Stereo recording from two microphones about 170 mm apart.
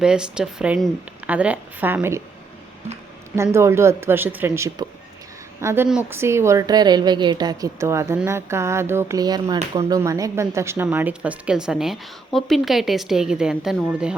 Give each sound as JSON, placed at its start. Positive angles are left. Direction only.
{"t": 0.0, "sound": "a woman's voice", "side_deg": -5}
{"t": 3.3, "sound": "a woman's voice", "side_deg": -15}